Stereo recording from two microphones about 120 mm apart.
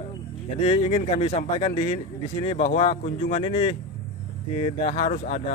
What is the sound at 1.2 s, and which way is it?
Speech, 70° left (ahead or behind).